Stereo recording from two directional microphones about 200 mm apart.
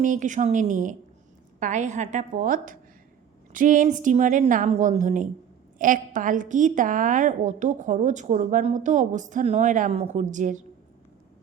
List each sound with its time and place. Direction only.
0.0 s a woman's voice: 40° right (ahead or behind)